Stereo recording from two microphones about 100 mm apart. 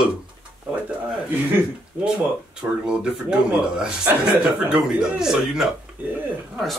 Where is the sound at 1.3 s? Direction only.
20° right (ahead or behind).